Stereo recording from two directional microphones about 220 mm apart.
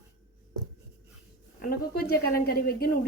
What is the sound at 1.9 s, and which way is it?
Speech, 45° left (ahead or behind).